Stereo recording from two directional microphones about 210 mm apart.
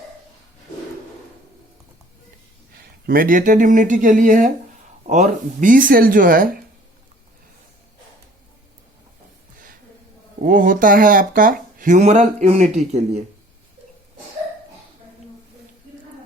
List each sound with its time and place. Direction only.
3.1 s speech: 40° right (ahead or behind)
10.4 s speech: 40° right (ahead or behind)